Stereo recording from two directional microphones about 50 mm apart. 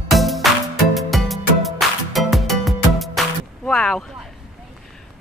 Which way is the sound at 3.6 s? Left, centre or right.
Centre.